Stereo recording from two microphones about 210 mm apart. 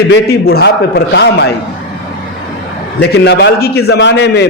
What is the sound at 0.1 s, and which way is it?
A man's voice, 50° left (ahead or behind).